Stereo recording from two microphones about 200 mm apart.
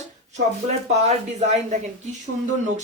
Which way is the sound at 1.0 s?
35° right (ahead or behind).